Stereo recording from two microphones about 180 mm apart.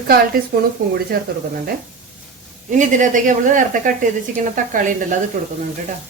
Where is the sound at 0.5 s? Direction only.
55° right (ahead or behind).